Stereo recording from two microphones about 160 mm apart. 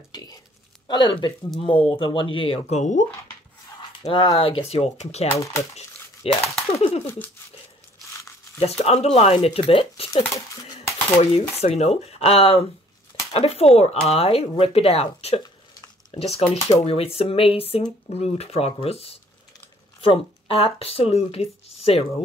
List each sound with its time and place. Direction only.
0.1 s a sound: 25° left (ahead or behind)
0.8 s speech: 30° left (ahead or behind)
2.8 s speech: 50° left (ahead or behind)
4.0 s speech: 30° left (ahead or behind)
5.3 s speech: 20° left (ahead or behind)
5.8 s a sound: 40° left (ahead or behind)
8.5 s speech: 40° left (ahead or behind)
10.1 s dishes: 20° left (ahead or behind)
11.6 s speech: 40° left (ahead or behind)